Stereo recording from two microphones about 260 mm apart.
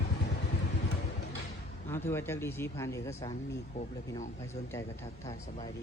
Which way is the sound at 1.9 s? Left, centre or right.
Centre.